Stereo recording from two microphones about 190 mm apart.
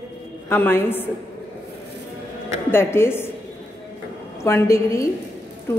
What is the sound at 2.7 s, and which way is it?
Speech, 10° left (ahead or behind).